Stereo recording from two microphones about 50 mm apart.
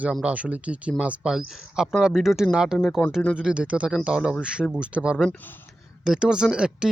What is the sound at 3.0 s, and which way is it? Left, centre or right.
Speech, left.